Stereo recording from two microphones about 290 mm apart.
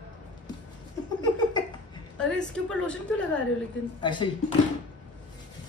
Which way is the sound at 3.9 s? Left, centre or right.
Centre.